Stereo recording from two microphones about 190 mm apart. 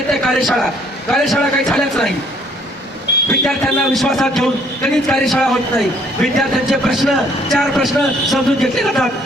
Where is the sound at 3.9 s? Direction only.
Centre (ahead or behind).